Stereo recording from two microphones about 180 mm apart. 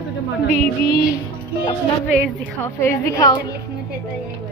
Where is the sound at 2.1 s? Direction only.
10° left (ahead or behind).